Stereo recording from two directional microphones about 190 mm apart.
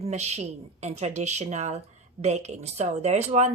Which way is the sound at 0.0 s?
35° right (ahead or behind).